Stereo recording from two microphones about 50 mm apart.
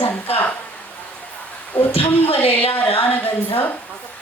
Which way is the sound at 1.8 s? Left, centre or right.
Left.